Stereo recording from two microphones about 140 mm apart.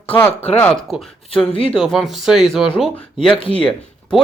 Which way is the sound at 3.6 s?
5° left (ahead or behind).